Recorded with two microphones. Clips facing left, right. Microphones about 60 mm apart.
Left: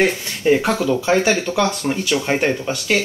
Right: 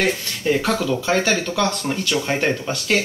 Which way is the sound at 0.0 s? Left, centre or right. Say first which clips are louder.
Left 4 dB; left.